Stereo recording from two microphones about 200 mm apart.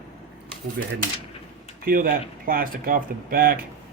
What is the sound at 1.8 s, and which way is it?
Speech, 45° right (ahead or behind).